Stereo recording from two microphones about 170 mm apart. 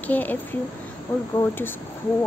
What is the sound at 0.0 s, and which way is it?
Speech, 10° left (ahead or behind).